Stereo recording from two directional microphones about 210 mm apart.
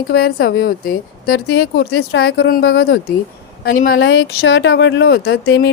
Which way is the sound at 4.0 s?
65° left (ahead or behind).